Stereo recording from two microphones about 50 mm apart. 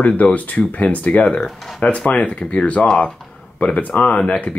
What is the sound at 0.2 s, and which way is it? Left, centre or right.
Speech, left.